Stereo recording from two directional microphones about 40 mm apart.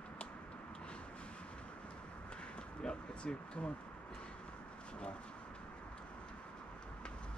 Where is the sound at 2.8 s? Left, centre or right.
Left.